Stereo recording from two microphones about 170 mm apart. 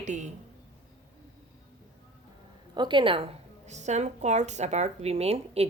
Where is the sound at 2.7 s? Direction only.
25° right (ahead or behind).